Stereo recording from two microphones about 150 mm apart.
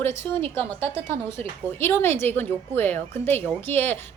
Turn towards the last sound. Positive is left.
turn(degrees=15)  # may be behind; listen again after turning